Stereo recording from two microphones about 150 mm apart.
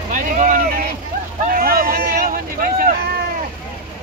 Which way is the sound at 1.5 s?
80° right.